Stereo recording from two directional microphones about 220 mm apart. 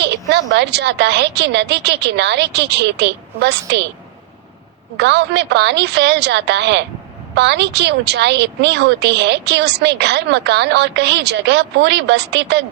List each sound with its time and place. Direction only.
0.0 s speech: 50° right (ahead or behind)
4.9 s speech: 50° right (ahead or behind)